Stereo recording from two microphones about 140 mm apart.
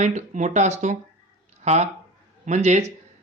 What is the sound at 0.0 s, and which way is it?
Speech, 60° right (ahead or behind).